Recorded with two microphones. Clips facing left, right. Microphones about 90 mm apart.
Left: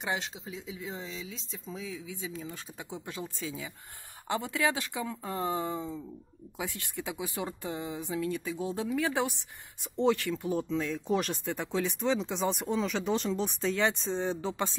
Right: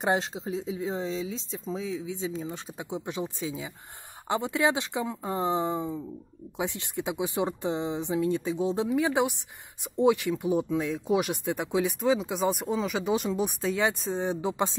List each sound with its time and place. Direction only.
0.0 s speech: 40° right (ahead or behind); by 14.8 s 15° right (ahead or behind)